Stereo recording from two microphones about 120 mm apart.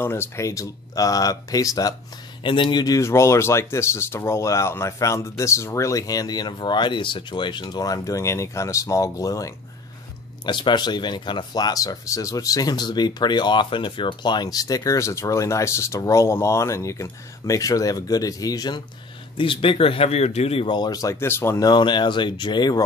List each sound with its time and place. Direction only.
0.0 s speech: 20° left (ahead or behind)
2.4 s speech: 40° left (ahead or behind)
10.4 s speech: 40° left (ahead or behind)
19.3 s a man's voice: 45° left (ahead or behind)
20.6 s speech: 35° left (ahead or behind)